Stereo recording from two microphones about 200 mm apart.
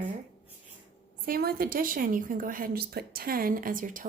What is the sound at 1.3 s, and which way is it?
A woman's voice, 50° right (ahead or behind).